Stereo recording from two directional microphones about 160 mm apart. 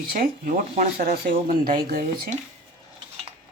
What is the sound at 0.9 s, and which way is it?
Speech, 75° right (ahead or behind).